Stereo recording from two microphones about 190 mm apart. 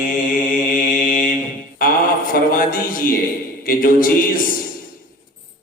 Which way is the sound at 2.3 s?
45° left (ahead or behind).